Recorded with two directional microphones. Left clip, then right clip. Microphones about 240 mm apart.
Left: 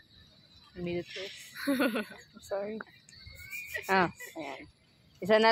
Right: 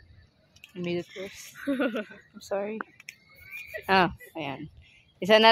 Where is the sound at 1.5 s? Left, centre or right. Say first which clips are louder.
Right 1 dB; centre.